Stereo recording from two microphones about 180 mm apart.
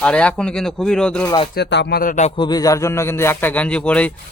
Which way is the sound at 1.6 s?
70° left (ahead or behind).